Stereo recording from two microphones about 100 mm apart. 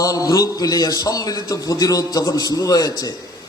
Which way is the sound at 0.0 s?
35° left (ahead or behind).